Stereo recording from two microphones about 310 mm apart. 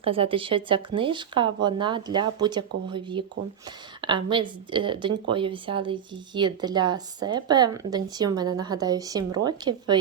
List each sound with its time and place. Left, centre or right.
0.0 s speech: centre